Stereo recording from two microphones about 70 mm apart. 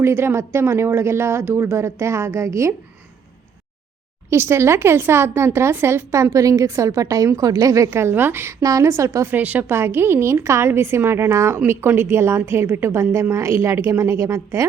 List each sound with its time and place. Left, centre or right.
0.0 s speech: right
4.3 s speech: right
8.6 s a woman's voice: right
9.4 s a woman's voice: right